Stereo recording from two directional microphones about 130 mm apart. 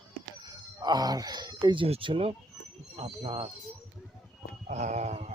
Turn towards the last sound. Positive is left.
turn(degrees=-60)  # may be behind; listen again after turning